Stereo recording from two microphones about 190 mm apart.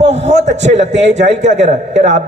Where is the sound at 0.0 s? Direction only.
35° right (ahead or behind).